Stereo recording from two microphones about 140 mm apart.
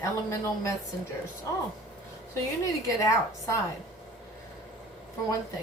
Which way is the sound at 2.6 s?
25° left (ahead or behind).